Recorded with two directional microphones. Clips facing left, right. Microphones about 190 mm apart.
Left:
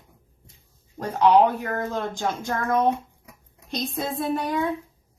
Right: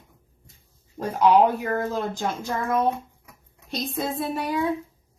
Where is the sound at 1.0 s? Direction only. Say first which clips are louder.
Even; 10° right (ahead or behind).